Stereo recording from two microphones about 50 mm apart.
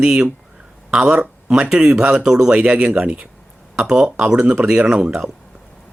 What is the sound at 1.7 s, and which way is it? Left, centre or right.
Speech, centre.